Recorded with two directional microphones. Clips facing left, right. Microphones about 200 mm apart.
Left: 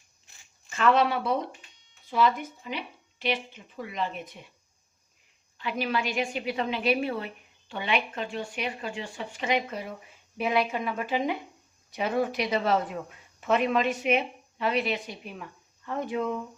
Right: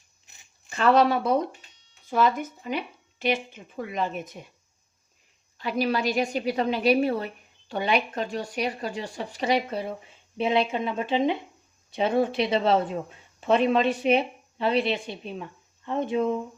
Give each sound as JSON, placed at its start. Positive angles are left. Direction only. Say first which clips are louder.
{"t": 0.7, "sound": "speech", "louder": "right 3 dB", "side_deg": -35}
{"t": 5.5, "sound": "speech", "louder": "right 4 dB", "side_deg": -40}